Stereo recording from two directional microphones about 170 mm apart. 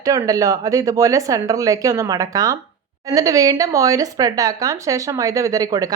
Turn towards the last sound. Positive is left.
turn(degrees=-20)  # may be behind; listen again after turning